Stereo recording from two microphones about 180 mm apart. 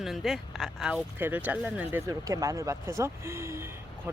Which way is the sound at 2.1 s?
20° right (ahead or behind).